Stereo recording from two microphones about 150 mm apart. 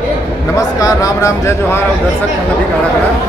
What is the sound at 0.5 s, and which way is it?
A man's voice, 20° left (ahead or behind).